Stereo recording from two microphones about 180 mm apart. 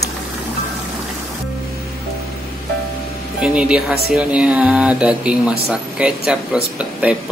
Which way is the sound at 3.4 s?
5° right (ahead or behind).